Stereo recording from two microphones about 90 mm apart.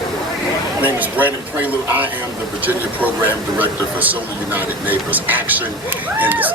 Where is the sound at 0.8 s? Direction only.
20° right (ahead or behind).